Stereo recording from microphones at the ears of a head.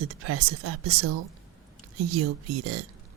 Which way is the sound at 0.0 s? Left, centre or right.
Right.